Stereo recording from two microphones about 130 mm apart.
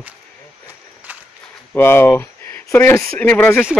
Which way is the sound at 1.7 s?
20° left (ahead or behind).